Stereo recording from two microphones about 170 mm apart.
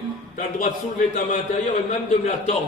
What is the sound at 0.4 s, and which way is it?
A man's voice, 45° left (ahead or behind).